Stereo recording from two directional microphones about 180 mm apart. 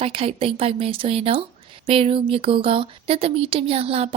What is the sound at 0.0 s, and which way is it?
A woman's voice, 30° right (ahead or behind).